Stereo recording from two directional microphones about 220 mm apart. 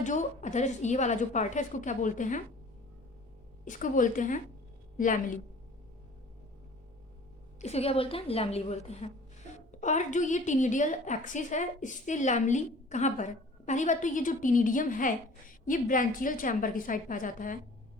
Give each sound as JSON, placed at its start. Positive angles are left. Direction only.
{"t": 0.0, "sound": "a woman's voice", "side_deg": 35}
{"t": 3.7, "sound": "a woman's voice", "side_deg": 35}
{"t": 7.6, "sound": "a woman's voice", "side_deg": 30}